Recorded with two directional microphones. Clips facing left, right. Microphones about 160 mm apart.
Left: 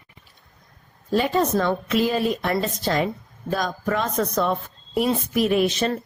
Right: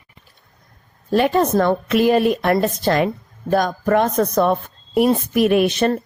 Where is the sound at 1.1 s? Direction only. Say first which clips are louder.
Right 5 dB; 60° right (ahead or behind).